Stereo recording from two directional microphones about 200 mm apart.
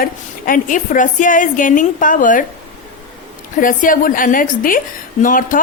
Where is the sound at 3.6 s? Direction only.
45° left (ahead or behind).